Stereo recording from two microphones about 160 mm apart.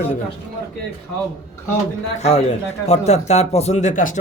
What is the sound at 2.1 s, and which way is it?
Speech, 45° left (ahead or behind).